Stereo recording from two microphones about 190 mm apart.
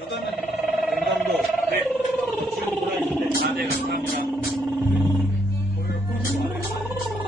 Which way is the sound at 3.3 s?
60° right (ahead or behind).